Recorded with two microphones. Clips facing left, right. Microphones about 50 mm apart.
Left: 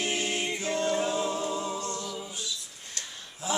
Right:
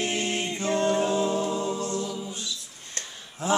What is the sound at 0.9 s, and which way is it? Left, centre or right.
Music, right.